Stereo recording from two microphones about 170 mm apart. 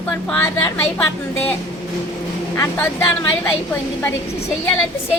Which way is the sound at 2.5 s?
15° left (ahead or behind).